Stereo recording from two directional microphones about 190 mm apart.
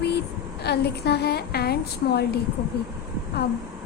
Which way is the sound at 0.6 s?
60° left (ahead or behind).